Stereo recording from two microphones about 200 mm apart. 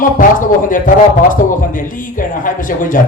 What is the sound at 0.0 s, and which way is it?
Speech, 40° left (ahead or behind).